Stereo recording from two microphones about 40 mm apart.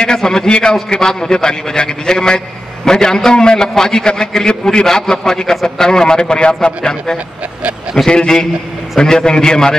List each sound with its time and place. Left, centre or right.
0.0 s a man's voice: centre